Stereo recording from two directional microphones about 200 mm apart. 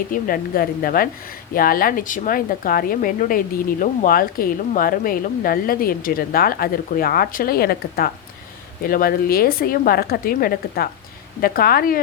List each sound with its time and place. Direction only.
0.1 s a woman's voice: 45° left (ahead or behind)